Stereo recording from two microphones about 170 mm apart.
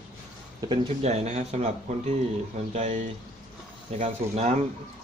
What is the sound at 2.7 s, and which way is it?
Speech, 45° right (ahead or behind).